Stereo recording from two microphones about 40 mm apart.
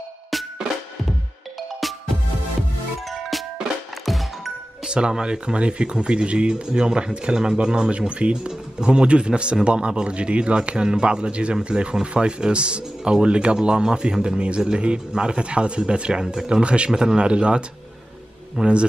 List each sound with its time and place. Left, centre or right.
0.3 s music: centre
3.1 s music: centre
4.8 s speech: right